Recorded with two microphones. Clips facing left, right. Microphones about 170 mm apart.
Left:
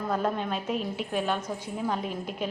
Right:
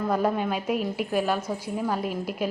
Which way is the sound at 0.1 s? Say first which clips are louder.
Right 3 dB; 10° right (ahead or behind).